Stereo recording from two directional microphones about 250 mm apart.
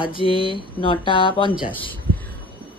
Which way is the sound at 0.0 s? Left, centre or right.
Left.